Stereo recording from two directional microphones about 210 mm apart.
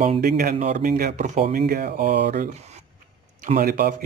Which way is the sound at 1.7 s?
45° right (ahead or behind).